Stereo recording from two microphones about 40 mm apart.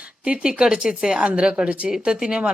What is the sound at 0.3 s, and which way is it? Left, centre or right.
Speech, right.